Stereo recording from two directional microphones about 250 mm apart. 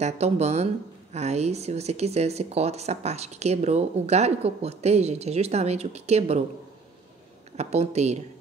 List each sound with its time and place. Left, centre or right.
0.0 s speech: right
7.5 s speech: right